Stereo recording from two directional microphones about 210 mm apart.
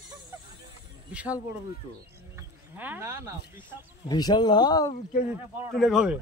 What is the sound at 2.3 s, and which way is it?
Speech, 10° right (ahead or behind).